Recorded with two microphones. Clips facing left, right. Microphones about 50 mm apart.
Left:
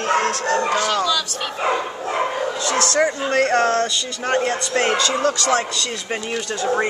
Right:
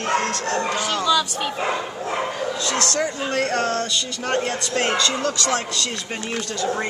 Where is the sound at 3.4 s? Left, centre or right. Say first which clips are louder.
Left 5 dB; left.